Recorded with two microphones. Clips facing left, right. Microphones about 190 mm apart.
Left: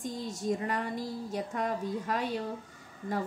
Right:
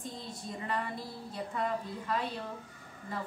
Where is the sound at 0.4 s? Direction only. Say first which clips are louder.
Left 5 dB; 45° left (ahead or behind).